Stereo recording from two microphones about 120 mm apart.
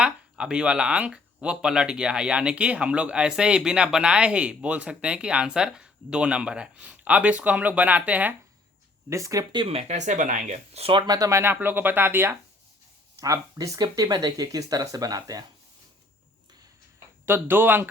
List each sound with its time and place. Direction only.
0.0 s speech: 5° right (ahead or behind)
9.0 s speech: 25° right (ahead or behind)
9.6 s speech: 60° right (ahead or behind)
11.0 s speech: 30° right (ahead or behind)
17.2 s speech: 20° right (ahead or behind)